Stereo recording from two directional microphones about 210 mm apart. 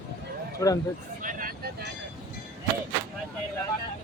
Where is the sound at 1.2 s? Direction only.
40° right (ahead or behind).